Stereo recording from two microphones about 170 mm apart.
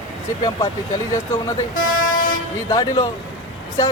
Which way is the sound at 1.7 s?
50° left (ahead or behind).